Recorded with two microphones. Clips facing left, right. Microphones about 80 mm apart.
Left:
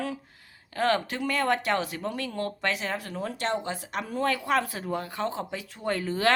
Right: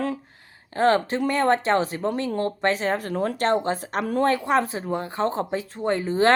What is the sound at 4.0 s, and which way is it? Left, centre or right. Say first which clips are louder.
Speech: right 7 dB; right.